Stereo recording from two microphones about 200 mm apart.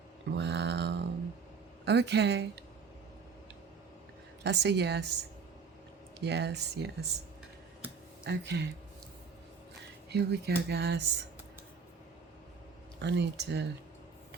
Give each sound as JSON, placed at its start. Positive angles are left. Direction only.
{"t": 0.3, "sound": "a sound", "side_deg": -60}
{"t": 1.8, "sound": "speech", "side_deg": -55}
{"t": 4.4, "sound": "speech", "side_deg": -60}
{"t": 6.2, "sound": "speech", "side_deg": -55}
{"t": 8.3, "sound": "speech", "side_deg": -60}
{"t": 10.1, "sound": "speech", "side_deg": -55}
{"t": 13.0, "sound": "speech", "side_deg": -60}